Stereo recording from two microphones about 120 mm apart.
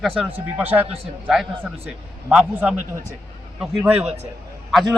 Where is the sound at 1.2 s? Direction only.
Centre (ahead or behind).